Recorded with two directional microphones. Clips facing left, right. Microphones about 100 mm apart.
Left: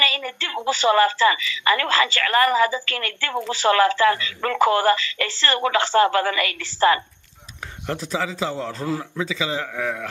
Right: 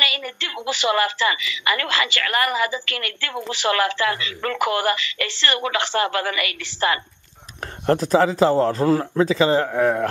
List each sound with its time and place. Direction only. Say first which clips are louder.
0.0 s a sound: left 2 dB; 15° right (ahead or behind)
0.7 s a woman's voice: left 4 dB; 15° right (ahead or behind)
7.8 s a man's voice: right 9 dB; 50° right (ahead or behind)